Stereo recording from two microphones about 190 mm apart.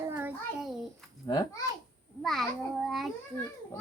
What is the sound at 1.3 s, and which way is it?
Speech, 20° left (ahead or behind).